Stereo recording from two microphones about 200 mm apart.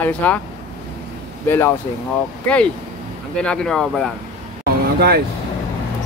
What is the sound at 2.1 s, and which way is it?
Speech, 5° left (ahead or behind).